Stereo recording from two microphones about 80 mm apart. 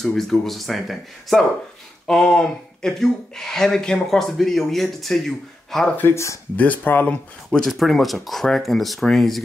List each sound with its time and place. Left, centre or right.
0.0 s speech: centre
5.9 s speech: left
6.5 s speech: centre
7.5 s speech: centre